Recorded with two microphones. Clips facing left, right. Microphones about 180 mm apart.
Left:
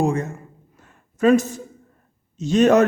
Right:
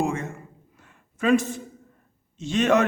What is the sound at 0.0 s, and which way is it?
A man's voice, 40° left (ahead or behind).